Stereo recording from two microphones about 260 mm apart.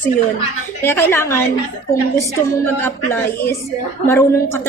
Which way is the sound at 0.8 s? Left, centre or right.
Centre.